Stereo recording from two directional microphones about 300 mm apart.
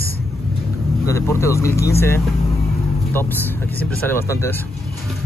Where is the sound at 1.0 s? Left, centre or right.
Centre.